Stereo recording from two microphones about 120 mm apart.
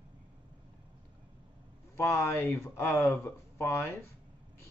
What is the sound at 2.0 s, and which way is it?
Speech, 20° left (ahead or behind).